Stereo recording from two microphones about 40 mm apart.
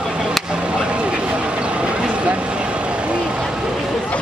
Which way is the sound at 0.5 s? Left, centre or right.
Right.